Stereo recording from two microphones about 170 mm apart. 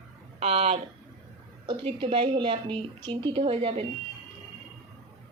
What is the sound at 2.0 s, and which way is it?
Speech, 35° right (ahead or behind).